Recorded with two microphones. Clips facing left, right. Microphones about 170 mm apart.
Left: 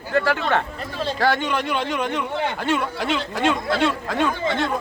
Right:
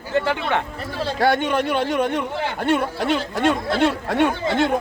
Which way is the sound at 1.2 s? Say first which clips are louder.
Right 3 dB; 50° right (ahead or behind).